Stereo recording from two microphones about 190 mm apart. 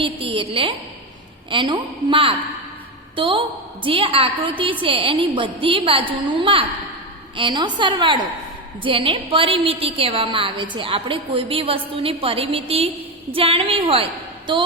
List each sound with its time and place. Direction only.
0.0 s a woman's voice: 25° right (ahead or behind)